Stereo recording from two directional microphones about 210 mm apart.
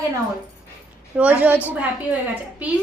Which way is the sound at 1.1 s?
5° right (ahead or behind).